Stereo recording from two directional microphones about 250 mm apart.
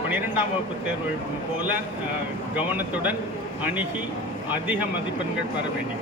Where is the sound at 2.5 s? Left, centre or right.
Centre.